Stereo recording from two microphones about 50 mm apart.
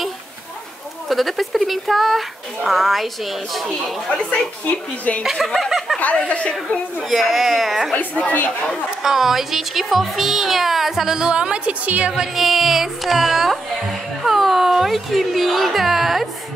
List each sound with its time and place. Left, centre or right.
1.0 s speech: centre
4.1 s a woman's voice: left
5.2 s speech: centre
5.9 s a woman's voice: left
7.0 s speech: centre
8.2 s speech: left
9.0 s speech: centre; by 12.1 s right
12.4 s speech: centre